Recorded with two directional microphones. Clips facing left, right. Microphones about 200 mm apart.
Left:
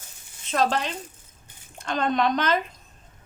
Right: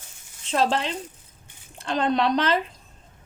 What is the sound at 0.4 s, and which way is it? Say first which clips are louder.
Speech: right 1 dB; 30° right (ahead or behind).